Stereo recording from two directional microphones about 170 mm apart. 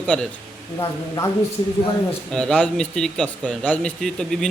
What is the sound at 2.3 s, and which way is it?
Speech, 5° left (ahead or behind).